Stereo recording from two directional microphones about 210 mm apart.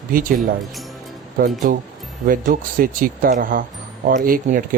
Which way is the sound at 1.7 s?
45° right (ahead or behind).